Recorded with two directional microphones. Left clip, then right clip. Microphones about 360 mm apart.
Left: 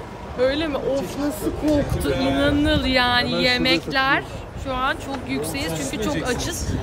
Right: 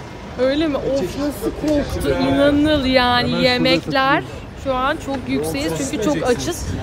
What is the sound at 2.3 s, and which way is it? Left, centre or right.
Speech, centre.